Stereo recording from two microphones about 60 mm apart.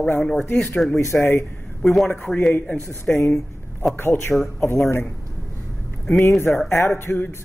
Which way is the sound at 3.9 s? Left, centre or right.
Left.